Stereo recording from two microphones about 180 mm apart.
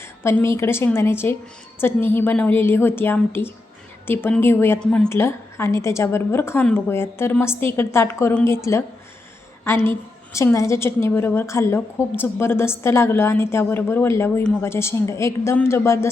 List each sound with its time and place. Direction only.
0.0 s a woman's voice: 15° left (ahead or behind)
10.3 s a woman's voice: 15° left (ahead or behind)